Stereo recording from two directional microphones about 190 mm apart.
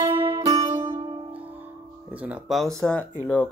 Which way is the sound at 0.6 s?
35° right (ahead or behind).